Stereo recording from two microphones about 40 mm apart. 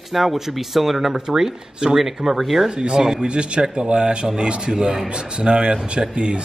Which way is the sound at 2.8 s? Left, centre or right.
Centre.